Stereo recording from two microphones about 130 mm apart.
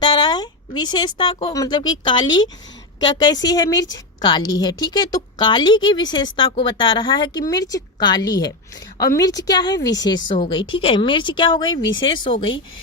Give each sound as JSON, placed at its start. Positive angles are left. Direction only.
{"t": 0.0, "sound": "a sound", "side_deg": 35}
{"t": 1.5, "sound": "a woman's voice", "side_deg": 30}
{"t": 10.5, "sound": "a woman's voice", "side_deg": 40}